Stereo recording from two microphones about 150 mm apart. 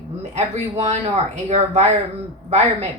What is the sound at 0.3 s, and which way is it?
Speech, 45° right (ahead or behind).